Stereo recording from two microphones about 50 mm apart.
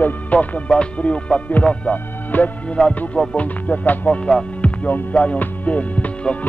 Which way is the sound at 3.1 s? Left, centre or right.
Left.